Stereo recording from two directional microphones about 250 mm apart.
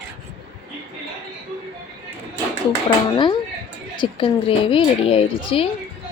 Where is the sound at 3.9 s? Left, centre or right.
Centre.